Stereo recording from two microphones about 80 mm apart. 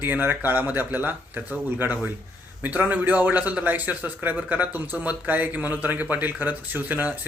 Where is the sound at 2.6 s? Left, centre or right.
Right.